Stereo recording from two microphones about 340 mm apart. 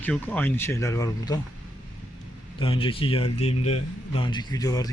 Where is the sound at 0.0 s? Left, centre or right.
Centre.